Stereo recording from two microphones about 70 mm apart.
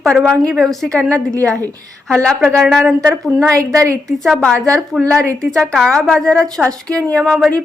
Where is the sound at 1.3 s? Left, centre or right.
Right.